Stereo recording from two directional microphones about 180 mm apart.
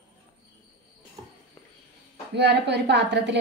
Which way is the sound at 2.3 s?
70° right (ahead or behind).